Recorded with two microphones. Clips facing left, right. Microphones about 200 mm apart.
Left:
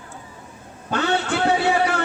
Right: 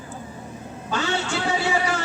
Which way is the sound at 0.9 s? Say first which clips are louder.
Left 4 dB; 60° left (ahead or behind).